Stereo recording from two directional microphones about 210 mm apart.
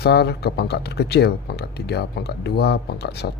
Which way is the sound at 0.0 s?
50° left (ahead or behind).